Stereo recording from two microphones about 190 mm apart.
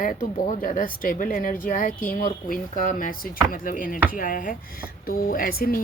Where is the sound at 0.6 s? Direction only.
45° left (ahead or behind).